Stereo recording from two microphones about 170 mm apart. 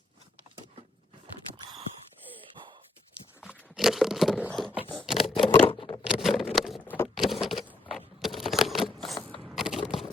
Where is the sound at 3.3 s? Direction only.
5° right (ahead or behind).